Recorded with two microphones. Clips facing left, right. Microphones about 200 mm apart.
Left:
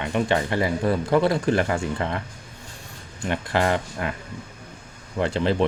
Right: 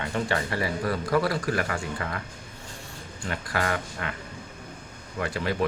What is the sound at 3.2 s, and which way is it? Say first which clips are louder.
Speech: left 6 dB; 25° left (ahead or behind).